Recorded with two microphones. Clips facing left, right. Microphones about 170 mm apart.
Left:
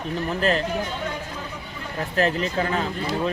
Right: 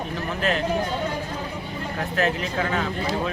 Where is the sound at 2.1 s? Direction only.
35° left (ahead or behind).